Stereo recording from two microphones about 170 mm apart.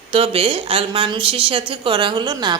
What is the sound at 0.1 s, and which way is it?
A woman's voice, 30° right (ahead or behind).